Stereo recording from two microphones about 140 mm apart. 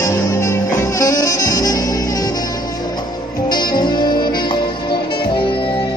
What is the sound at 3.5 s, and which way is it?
Music, 30° left (ahead or behind).